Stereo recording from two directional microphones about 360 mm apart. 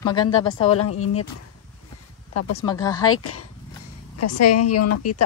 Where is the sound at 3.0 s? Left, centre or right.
Left.